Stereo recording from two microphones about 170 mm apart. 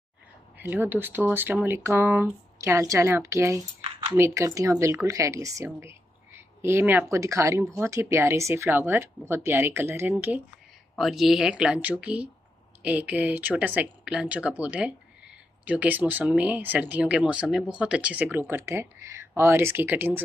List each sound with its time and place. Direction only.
0.6 s speech: 10° right (ahead or behind)